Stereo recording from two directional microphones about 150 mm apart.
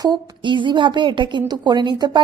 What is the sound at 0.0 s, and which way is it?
A woman's voice, 30° right (ahead or behind).